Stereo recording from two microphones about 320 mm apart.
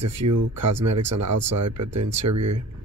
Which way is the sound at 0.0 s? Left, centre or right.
Right.